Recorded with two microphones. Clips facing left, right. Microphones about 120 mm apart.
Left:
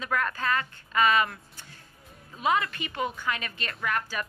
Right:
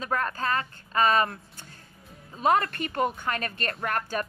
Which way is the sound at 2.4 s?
55° right (ahead or behind).